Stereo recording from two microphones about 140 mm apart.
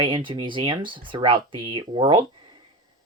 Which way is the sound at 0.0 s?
35° right (ahead or behind).